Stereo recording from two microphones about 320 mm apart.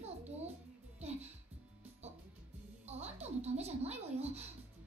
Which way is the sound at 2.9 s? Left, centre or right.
Centre.